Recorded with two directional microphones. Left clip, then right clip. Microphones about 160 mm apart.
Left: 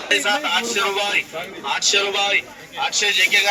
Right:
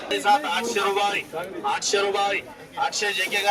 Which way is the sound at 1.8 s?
40° right (ahead or behind).